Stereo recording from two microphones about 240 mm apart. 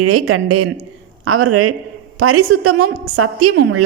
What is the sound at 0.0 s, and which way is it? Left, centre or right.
A woman's voice, right.